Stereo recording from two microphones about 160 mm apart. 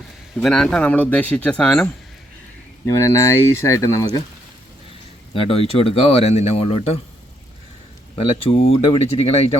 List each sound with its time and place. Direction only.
0.3 s speech: 5° left (ahead or behind)
2.8 s speech: 20° left (ahead or behind)
5.3 s speech: 35° left (ahead or behind)
8.1 s speech: 35° left (ahead or behind)